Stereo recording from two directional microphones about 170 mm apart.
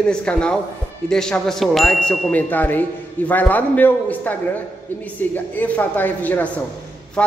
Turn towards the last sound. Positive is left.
turn(degrees=5)  # may be behind; listen again after turning